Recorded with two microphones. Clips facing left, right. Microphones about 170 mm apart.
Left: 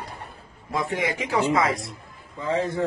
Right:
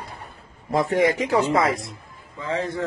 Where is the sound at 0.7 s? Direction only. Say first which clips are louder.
Right 7 dB; 45° right (ahead or behind).